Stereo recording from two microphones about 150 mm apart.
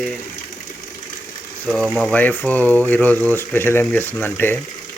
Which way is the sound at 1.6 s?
5° left (ahead or behind).